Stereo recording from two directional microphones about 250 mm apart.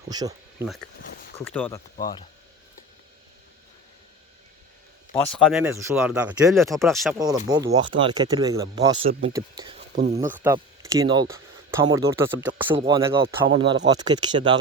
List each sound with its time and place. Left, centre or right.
0.1 s speech: centre
1.5 s speech: centre
5.1 s speech: centre
7.2 s speech: centre
10.3 s speech: centre
12.7 s speech: centre